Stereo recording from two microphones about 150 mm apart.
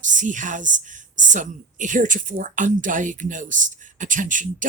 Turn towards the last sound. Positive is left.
turn(degrees=-60)  # may be behind; listen again after turning